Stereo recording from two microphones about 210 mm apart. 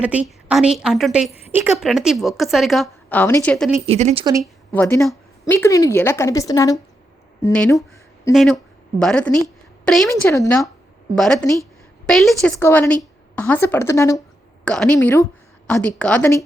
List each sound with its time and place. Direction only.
0.0 s a woman's voice: 5° right (ahead or behind)
3.8 s speech: 30° right (ahead or behind)
4.7 s a woman's voice: 10° left (ahead or behind)
10.1 s a woman's voice: 15° left (ahead or behind)
11.1 s a woman's voice: 5° left (ahead or behind)